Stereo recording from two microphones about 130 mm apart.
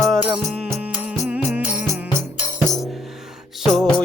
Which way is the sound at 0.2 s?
10° right (ahead or behind).